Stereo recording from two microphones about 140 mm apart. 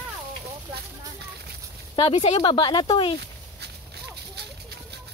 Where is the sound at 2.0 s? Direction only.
45° left (ahead or behind).